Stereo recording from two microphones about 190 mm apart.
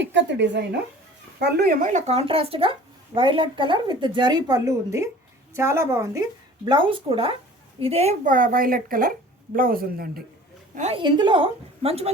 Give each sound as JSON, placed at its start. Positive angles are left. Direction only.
{"t": 0.0, "sound": "a woman's voice", "side_deg": -70}
{"t": 6.7, "sound": "a woman's voice", "side_deg": -25}
{"t": 10.8, "sound": "speech", "side_deg": -35}
{"t": 11.0, "sound": "a woman's voice", "side_deg": -25}